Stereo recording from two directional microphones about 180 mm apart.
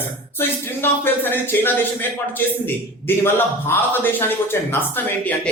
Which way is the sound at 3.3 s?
10° left (ahead or behind).